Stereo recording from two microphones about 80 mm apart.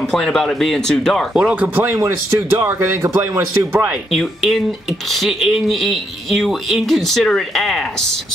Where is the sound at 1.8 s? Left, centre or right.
Right.